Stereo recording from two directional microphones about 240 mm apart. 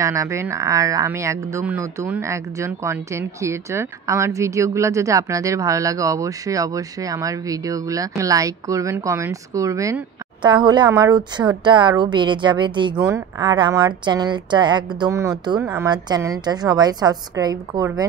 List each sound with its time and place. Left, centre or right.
0.0 s a woman's voice: centre